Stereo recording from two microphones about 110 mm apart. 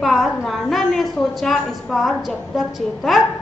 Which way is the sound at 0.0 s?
Centre (ahead or behind).